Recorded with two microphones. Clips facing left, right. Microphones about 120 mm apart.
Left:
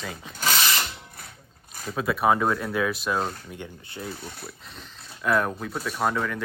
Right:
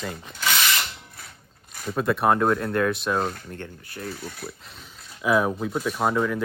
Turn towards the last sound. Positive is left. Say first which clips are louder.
# right 3 dB
turn(degrees=-5)  # may be behind; listen again after turning